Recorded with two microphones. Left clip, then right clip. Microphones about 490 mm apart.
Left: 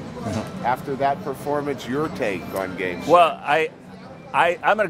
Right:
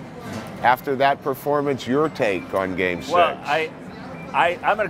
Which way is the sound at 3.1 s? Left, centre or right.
Left.